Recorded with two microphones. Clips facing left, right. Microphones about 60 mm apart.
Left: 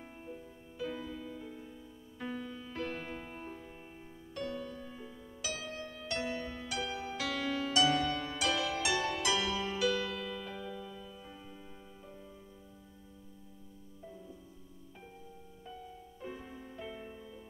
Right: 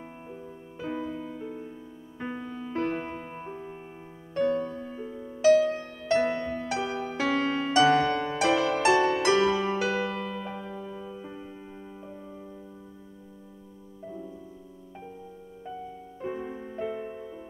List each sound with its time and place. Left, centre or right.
0.0 s music: right
16.2 s music: right